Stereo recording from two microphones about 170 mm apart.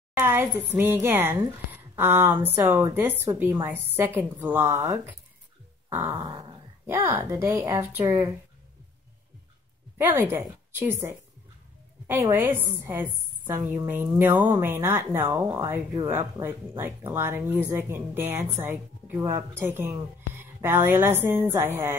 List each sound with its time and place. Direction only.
0.2 s a woman's voice: 15° right (ahead or behind)
5.9 s dog: 15° right (ahead or behind)
6.1 s dog: 30° right (ahead or behind)
6.9 s a woman's voice: 15° right (ahead or behind)
9.9 s a woman's voice: 10° right (ahead or behind)